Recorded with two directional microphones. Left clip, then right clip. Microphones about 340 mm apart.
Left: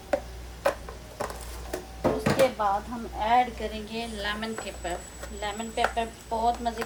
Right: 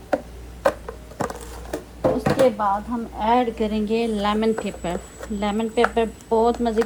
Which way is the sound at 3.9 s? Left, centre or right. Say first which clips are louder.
Right 12 dB; centre.